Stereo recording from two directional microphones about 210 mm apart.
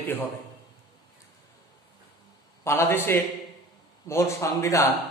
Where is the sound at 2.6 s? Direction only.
10° left (ahead or behind).